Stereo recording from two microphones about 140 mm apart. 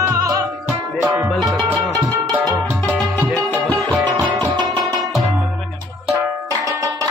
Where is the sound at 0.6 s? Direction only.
10° right (ahead or behind).